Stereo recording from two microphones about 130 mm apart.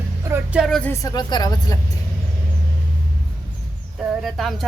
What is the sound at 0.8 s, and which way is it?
Speech, 25° left (ahead or behind).